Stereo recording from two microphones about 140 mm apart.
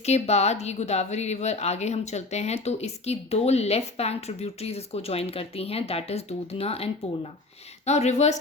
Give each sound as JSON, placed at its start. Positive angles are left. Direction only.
{"t": 0.0, "sound": "a woman's voice", "side_deg": 50}